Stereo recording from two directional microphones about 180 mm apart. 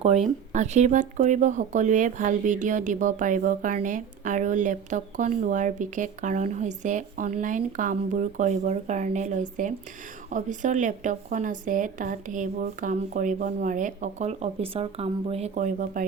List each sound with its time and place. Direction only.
0.5 s speech: 40° right (ahead or behind)